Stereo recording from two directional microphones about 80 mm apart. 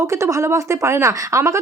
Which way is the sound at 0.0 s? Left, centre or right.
Right.